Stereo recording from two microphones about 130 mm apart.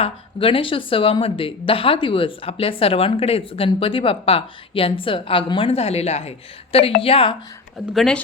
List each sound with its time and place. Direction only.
0.0 s speech: 45° left (ahead or behind)
7.9 s speech: 5° left (ahead or behind)